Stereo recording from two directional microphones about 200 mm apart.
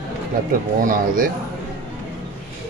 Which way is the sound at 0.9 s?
45° right (ahead or behind).